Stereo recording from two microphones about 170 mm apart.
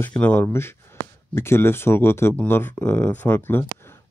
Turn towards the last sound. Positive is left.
turn(degrees=10)  # may be behind; listen again after turning